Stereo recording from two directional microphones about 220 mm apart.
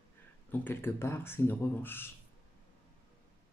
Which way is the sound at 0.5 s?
10° left (ahead or behind).